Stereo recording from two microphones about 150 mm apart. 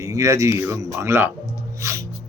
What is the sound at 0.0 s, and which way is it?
Speech, 20° right (ahead or behind).